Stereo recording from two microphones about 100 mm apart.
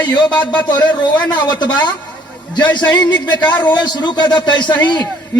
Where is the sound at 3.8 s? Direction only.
45° left (ahead or behind).